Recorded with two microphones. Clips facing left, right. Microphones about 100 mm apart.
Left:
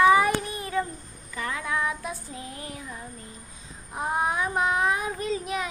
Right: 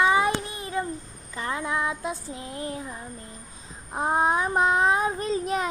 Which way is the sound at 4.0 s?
30° right (ahead or behind).